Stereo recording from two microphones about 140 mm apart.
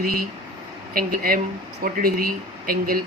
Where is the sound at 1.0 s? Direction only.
90° right.